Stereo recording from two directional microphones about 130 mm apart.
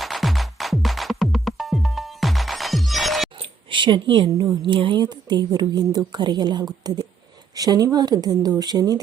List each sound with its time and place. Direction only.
0.0 s music: centre (ahead or behind)
3.3 s a sound: 40° right (ahead or behind)
4.6 s a woman's voice: 40° right (ahead or behind)